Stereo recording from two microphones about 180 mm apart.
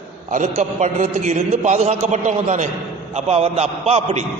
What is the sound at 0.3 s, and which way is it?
A man's voice, 40° right (ahead or behind).